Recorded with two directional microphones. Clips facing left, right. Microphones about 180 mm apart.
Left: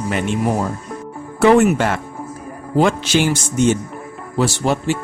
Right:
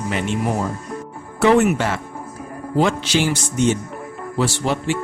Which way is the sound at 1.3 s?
50° left (ahead or behind).